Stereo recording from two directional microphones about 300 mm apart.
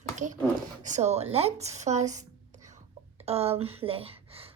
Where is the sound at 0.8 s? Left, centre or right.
Right.